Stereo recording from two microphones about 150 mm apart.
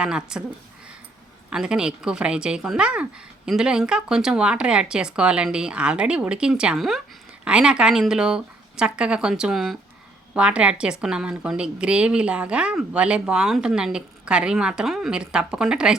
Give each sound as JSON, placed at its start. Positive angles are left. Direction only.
{"t": 0.0, "sound": "a woman's voice", "side_deg": -5}
{"t": 1.5, "sound": "a woman's voice", "side_deg": -5}